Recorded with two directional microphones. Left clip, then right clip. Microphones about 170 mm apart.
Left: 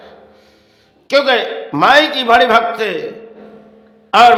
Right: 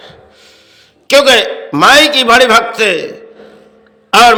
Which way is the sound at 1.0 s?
25° right (ahead or behind).